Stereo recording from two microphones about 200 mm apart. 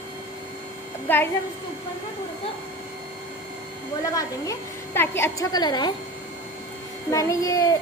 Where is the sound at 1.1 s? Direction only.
10° left (ahead or behind).